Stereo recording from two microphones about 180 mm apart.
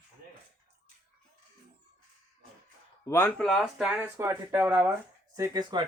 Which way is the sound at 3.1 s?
15° left (ahead or behind).